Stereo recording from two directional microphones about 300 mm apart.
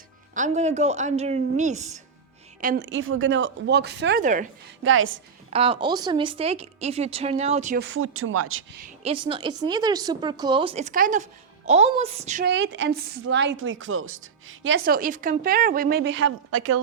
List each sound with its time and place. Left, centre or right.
0.3 s a woman's voice: right
4.8 s speech: right
5.5 s a woman's voice: centre
7.9 s speech: right
8.8 s a woman's voice: centre; by 16.7 s right